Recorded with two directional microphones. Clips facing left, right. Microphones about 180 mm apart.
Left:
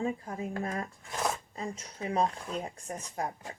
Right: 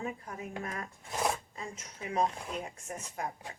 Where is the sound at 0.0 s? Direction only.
30° left (ahead or behind).